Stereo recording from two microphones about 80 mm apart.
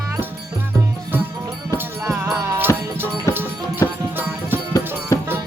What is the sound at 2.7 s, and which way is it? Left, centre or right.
Music, left.